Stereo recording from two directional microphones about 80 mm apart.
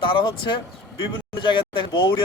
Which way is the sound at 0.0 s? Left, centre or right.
Left.